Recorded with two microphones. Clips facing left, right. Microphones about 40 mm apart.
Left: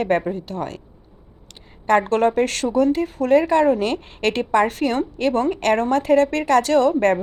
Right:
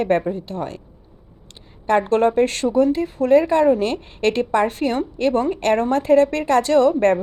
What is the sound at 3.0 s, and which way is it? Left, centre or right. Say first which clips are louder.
Speech: right 1 dB; left.